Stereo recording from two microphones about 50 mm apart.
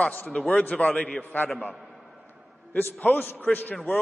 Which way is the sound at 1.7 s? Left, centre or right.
Centre.